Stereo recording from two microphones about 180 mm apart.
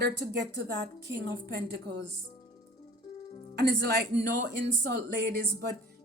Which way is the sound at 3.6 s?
65° right (ahead or behind).